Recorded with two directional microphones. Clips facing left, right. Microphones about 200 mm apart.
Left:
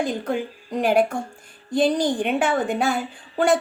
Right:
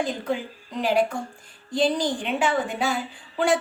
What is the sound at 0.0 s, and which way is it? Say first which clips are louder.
A woman's voice: left 2 dB; 50° left (ahead or behind).